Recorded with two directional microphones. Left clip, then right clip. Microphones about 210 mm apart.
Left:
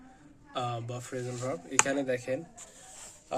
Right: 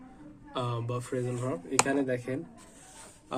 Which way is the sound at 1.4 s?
25° left (ahead or behind).